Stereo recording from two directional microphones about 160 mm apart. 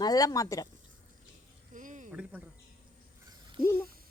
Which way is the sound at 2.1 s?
5° right (ahead or behind).